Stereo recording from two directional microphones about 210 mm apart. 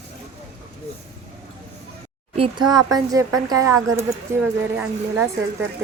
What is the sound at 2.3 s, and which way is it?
Speech, 25° right (ahead or behind).